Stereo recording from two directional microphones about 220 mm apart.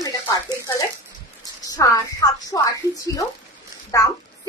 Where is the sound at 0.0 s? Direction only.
15° left (ahead or behind).